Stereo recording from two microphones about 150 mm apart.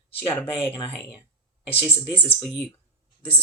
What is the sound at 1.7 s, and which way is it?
Speech, 40° left (ahead or behind).